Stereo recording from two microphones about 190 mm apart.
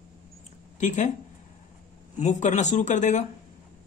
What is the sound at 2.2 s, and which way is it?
Speech, 40° left (ahead or behind).